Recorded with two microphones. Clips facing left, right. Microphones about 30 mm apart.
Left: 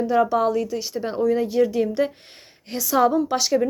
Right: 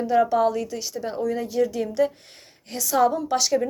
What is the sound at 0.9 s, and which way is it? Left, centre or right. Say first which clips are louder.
Speech: left 6 dB; left.